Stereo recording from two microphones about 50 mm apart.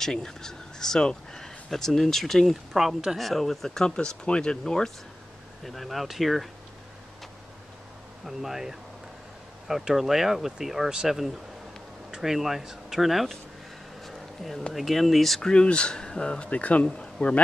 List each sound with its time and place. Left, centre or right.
0.0 s speech: centre
2.5 s speech: centre
3.2 s speech: centre
5.6 s speech: centre
8.3 s speech: centre
12.2 s speech: centre
14.0 s a sound: centre
14.7 s speech: centre
15.5 s speech: left